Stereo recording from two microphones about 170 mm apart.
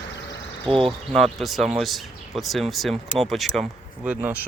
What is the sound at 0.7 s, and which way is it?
Speech, 30° right (ahead or behind).